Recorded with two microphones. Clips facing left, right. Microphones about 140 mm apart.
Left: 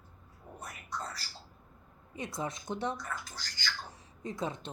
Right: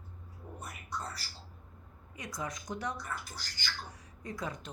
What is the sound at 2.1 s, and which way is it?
A woman's voice, 25° left (ahead or behind).